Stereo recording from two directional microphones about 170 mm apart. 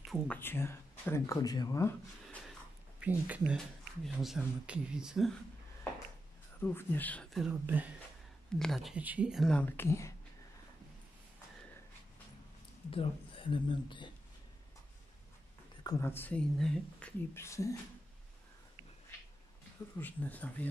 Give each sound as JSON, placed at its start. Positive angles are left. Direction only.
{"t": 0.1, "sound": "speech", "side_deg": 10}
{"t": 3.0, "sound": "speech", "side_deg": -10}
{"t": 6.6, "sound": "speech", "side_deg": 15}
{"t": 7.4, "sound": "speech", "side_deg": -10}
{"t": 8.5, "sound": "speech", "side_deg": 0}
{"t": 12.9, "sound": "speech", "side_deg": 30}
{"t": 15.8, "sound": "speech", "side_deg": 20}
{"t": 17.3, "sound": "speech", "side_deg": 15}
{"t": 20.0, "sound": "speech", "side_deg": 10}